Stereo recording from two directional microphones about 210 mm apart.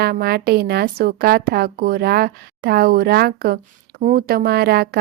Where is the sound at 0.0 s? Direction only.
50° right (ahead or behind).